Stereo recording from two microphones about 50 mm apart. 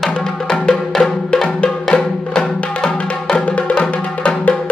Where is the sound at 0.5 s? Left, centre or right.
Left.